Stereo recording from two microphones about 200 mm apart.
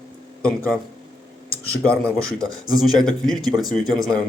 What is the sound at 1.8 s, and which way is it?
Speech, 5° left (ahead or behind).